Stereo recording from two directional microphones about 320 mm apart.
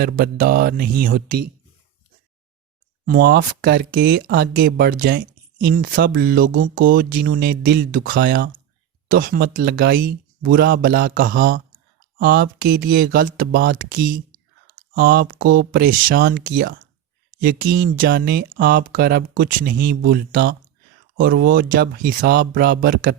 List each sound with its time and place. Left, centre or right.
0.0 s speech: right
3.1 s speech: right